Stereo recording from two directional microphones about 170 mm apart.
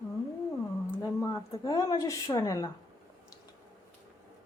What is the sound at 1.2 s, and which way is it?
A woman's voice, 20° left (ahead or behind).